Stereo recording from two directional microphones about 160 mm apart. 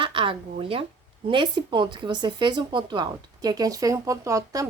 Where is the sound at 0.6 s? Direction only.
35° right (ahead or behind).